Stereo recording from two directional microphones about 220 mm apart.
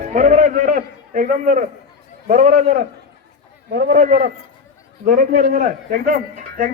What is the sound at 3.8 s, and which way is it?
A man's voice, 40° right (ahead or behind).